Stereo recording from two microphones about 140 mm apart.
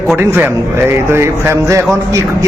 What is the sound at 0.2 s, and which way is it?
A man's voice, 15° right (ahead or behind).